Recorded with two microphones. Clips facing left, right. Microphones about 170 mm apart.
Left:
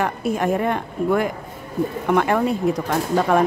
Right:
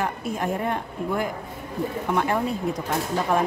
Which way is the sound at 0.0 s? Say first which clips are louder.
Left 5 dB; 75° left (ahead or behind).